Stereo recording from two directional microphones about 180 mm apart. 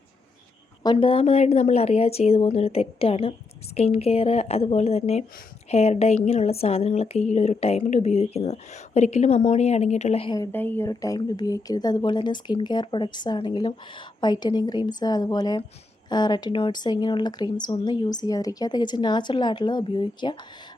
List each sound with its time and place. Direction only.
0.8 s speech: 25° left (ahead or behind)
10.3 s speech: 15° left (ahead or behind)